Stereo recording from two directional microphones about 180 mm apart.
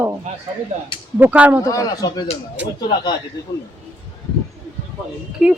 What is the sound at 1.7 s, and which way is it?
Speech, 20° left (ahead or behind).